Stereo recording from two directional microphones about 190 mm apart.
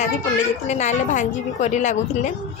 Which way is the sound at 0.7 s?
40° left (ahead or behind).